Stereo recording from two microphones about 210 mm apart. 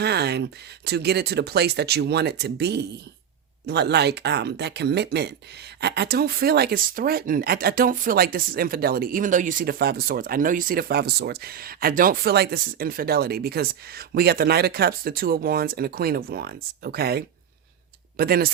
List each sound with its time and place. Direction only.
0.0 s speech: 50° right (ahead or behind)